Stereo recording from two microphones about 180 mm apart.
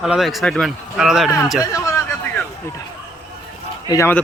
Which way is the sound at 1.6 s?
15° left (ahead or behind).